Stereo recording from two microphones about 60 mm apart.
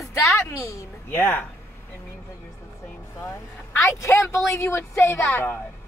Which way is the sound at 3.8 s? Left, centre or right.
Left.